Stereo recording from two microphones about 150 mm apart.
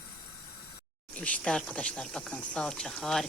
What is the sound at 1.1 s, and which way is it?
Speech, 10° left (ahead or behind).